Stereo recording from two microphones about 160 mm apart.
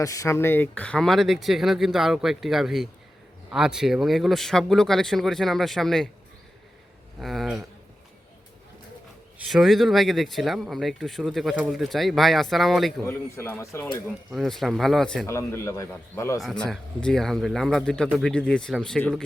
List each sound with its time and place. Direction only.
0.0 s speech: 20° left (ahead or behind); by 6.1 s centre (ahead or behind)
7.2 s speech: centre (ahead or behind)
9.5 s speech: centre (ahead or behind)
13.1 s a man's voice: 15° left (ahead or behind)
14.3 s speech: centre (ahead or behind)
15.3 s a man's voice: 15° left (ahead or behind)
16.4 s speech: centre (ahead or behind)